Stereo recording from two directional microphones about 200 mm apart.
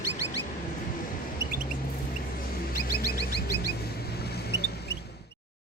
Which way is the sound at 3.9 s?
55° left (ahead or behind).